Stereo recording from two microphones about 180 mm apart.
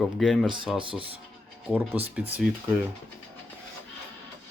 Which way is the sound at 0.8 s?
30° right (ahead or behind).